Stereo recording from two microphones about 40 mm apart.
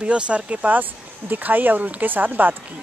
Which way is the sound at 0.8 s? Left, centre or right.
Right.